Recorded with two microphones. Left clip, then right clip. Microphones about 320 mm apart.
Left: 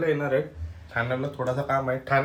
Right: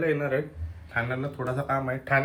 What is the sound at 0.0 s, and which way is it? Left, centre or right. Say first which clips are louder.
Speech: left 2 dB; centre.